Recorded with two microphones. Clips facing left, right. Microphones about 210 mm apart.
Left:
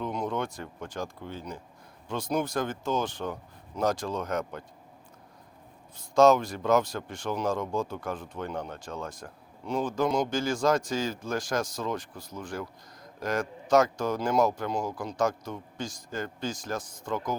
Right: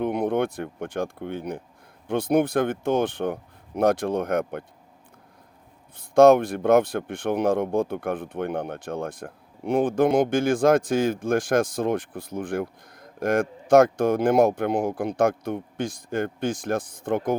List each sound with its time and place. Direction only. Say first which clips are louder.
0.0 s speech: right 8 dB; 60° right (ahead or behind)
6.0 s speech: right 6 dB; 60° right (ahead or behind)